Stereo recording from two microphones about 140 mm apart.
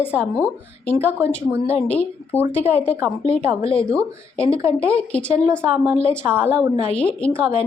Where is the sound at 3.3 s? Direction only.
40° left (ahead or behind).